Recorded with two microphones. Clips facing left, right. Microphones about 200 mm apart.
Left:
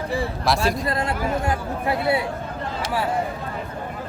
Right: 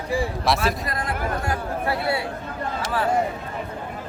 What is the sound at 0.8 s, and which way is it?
Speech, 25° left (ahead or behind).